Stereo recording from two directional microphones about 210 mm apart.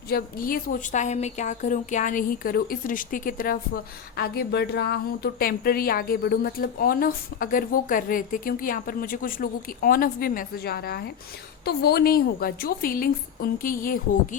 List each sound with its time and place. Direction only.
0.1 s a woman's voice: 45° left (ahead or behind)